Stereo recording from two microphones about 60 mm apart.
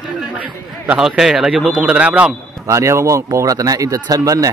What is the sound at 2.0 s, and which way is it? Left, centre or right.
Speech, right.